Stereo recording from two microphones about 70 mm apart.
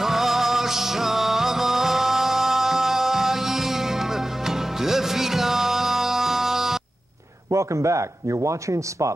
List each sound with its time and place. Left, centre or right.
0.0 s music: centre
7.5 s a man's voice: right